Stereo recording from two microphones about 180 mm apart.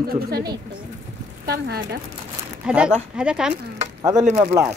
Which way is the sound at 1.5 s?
65° right (ahead or behind).